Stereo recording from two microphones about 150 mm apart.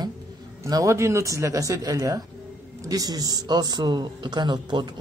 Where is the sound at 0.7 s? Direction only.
20° right (ahead or behind).